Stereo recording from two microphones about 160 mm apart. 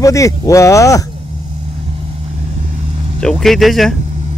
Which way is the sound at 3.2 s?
Centre (ahead or behind).